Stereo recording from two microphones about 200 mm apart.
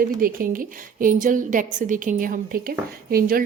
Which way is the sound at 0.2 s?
45° right (ahead or behind).